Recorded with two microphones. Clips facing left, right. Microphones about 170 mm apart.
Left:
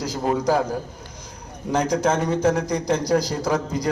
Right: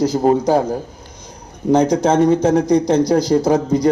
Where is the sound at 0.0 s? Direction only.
30° right (ahead or behind).